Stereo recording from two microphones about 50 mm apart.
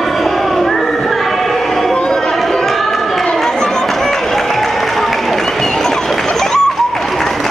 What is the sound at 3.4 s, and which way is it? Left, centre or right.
Chatter, centre.